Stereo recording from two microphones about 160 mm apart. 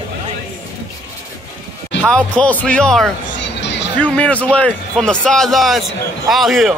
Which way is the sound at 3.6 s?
90° left.